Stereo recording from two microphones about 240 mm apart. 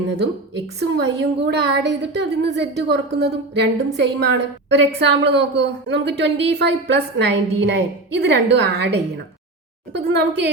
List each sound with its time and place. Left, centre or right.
0.2 s a woman's voice: right